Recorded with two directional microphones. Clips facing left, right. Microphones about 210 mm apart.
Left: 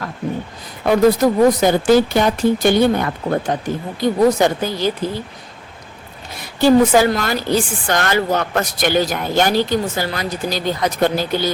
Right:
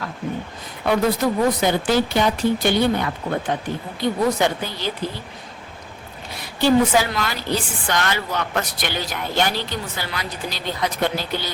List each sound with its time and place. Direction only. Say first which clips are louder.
0.9 s a woman's voice: left 6 dB; 45° left (ahead or behind)
6.6 s a woman's voice: left 5 dB; 45° left (ahead or behind)